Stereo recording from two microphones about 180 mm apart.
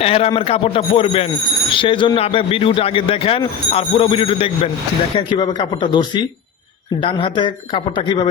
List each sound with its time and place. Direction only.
0.0 s a man's voice: 35° left (ahead or behind)